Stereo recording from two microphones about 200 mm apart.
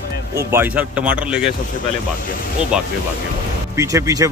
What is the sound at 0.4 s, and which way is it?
Speech, 10° right (ahead or behind).